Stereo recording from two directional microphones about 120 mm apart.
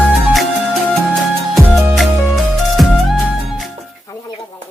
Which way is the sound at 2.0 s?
Centre (ahead or behind).